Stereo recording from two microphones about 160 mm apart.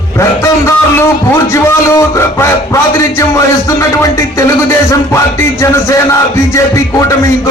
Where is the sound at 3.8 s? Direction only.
20° left (ahead or behind).